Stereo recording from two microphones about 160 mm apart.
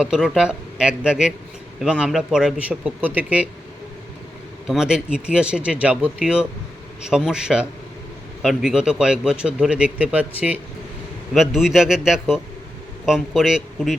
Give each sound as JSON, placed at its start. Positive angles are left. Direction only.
{"t": 0.0, "sound": "a man's voice", "side_deg": -5}
{"t": 4.6, "sound": "a man's voice", "side_deg": -5}